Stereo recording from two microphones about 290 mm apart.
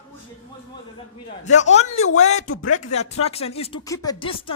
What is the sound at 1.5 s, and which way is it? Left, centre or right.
Speech, left.